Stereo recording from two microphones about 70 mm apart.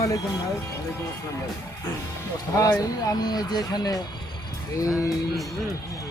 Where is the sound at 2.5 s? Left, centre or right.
Left.